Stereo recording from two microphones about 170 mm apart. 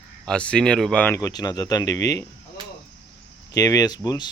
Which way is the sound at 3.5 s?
20° left (ahead or behind).